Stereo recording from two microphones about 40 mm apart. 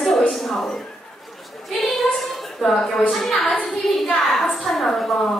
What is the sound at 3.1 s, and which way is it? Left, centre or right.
A woman's voice, centre.